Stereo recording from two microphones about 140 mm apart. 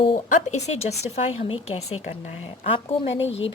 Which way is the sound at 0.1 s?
50° left (ahead or behind).